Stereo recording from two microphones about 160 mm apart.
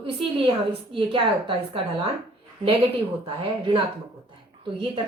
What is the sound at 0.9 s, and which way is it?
A woman's voice, 35° right (ahead or behind).